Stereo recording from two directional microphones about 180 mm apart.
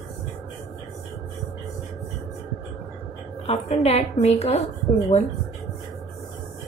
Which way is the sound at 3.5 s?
35° left (ahead or behind).